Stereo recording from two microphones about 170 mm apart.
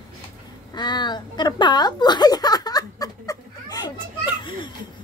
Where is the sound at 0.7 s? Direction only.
25° left (ahead or behind).